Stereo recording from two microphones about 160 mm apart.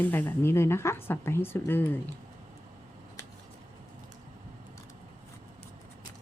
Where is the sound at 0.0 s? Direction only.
10° left (ahead or behind).